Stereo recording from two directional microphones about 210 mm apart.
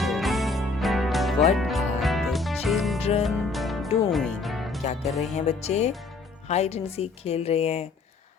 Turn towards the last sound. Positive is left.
turn(degrees=30)  # may be behind; listen again after turning